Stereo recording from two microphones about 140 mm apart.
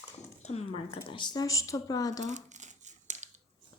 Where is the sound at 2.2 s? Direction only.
60° right (ahead or behind).